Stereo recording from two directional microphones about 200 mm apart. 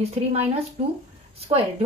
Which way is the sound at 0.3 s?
35° right (ahead or behind).